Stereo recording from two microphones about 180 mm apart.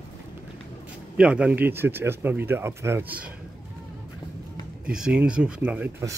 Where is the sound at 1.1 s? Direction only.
5° right (ahead or behind).